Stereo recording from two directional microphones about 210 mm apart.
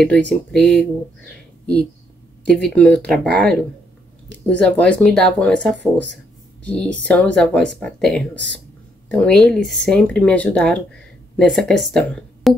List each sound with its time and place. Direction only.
0.0 s speech: centre (ahead or behind)
2.4 s speech: 5° left (ahead or behind)